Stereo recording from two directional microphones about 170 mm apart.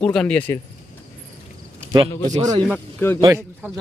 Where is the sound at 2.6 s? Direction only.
10° left (ahead or behind).